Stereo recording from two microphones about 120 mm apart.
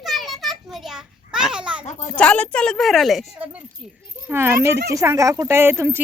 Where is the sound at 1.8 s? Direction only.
75° left (ahead or behind).